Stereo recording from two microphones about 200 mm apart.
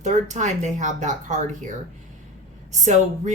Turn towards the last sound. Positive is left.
turn(degrees=-35)  # may be behind; listen again after turning